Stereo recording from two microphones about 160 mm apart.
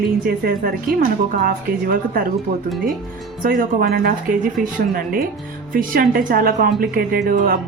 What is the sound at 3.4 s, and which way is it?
Speech, 65° right (ahead or behind).